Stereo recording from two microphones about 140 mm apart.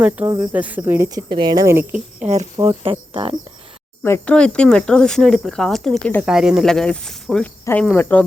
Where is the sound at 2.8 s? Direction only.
40° right (ahead or behind).